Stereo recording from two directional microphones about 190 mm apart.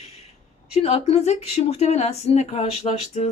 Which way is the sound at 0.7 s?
35° left (ahead or behind).